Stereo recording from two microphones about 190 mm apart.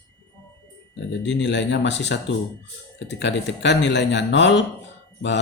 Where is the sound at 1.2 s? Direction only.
65° left (ahead or behind).